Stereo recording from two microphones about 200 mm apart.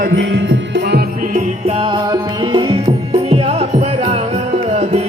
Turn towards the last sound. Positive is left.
turn(degrees=-30)  # may be behind; listen again after turning